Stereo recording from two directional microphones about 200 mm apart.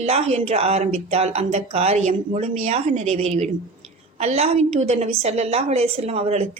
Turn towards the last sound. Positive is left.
turn(degrees=-30)  # may be behind; listen again after turning